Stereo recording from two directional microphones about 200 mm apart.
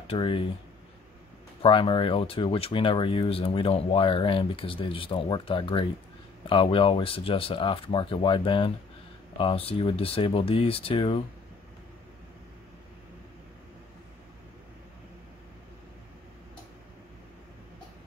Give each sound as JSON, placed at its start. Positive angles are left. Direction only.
{"t": 0.1, "sound": "speech", "side_deg": 25}
{"t": 1.6, "sound": "speech", "side_deg": 25}